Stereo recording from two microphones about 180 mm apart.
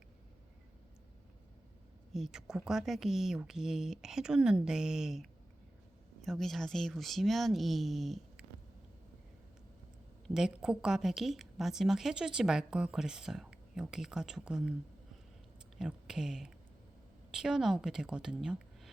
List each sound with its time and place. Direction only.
2.1 s a woman's voice: centre (ahead or behind)
10.2 s a woman's voice: 5° right (ahead or behind)
15.8 s a woman's voice: 5° right (ahead or behind)